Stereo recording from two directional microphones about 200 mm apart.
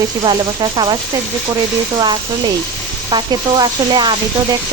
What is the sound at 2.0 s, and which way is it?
Speech, 20° right (ahead or behind).